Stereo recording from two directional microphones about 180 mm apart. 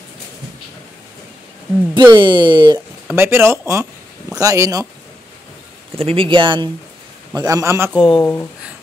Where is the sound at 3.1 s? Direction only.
15° right (ahead or behind).